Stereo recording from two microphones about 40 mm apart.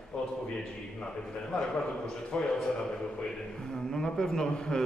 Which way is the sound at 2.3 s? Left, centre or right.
Left.